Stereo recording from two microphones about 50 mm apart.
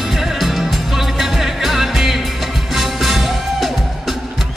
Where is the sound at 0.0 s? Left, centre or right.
Centre.